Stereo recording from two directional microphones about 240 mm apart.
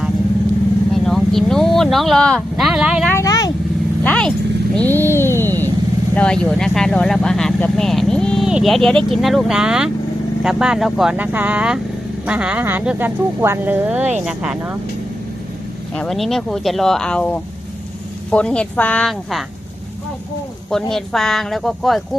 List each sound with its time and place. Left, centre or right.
0.9 s speech: centre
3.1 s vehicle: centre
6.1 s speech: centre
16.0 s speech: centre
20.7 s speech: centre